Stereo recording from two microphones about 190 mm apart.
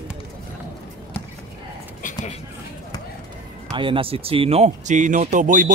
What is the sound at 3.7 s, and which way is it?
Speech, 25° right (ahead or behind).